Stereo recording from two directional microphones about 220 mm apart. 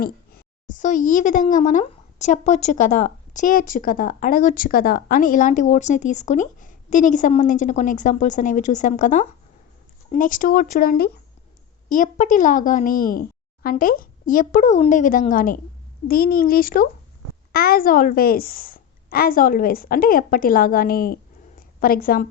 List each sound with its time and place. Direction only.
0.7 s speech: 35° left (ahead or behind)